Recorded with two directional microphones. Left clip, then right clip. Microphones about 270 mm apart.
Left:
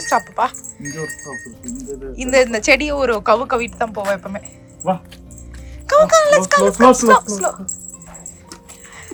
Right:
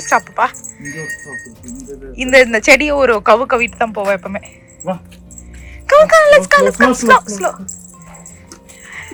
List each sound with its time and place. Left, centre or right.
0.0 s speech: centre
2.1 s speech: centre
5.9 s speech: centre
8.4 s music: centre